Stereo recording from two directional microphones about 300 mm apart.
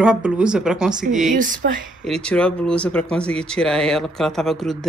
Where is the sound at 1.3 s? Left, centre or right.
Right.